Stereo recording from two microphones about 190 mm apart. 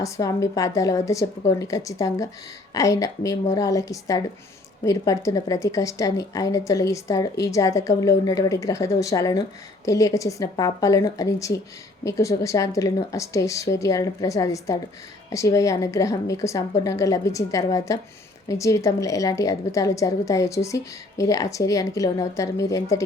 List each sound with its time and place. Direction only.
0.0 s a woman's voice: 15° left (ahead or behind)